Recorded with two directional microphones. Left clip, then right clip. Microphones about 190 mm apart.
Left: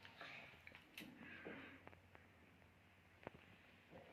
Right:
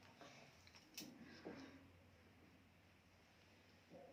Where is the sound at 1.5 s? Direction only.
10° right (ahead or behind).